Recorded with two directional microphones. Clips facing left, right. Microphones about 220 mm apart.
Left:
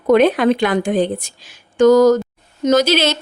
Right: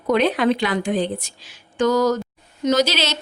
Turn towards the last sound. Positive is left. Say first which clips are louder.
# left 5 dB
turn(degrees=50)  # may be behind; listen again after turning